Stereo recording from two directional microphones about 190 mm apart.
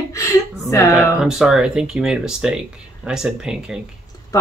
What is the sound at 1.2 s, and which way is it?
Speech, centre (ahead or behind).